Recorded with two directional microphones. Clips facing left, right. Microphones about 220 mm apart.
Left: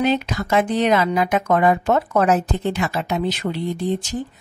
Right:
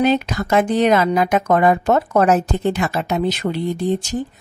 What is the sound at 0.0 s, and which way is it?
A woman's voice, 45° right (ahead or behind).